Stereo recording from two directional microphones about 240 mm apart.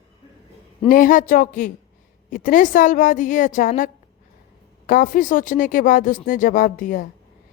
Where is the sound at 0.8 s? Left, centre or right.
Left.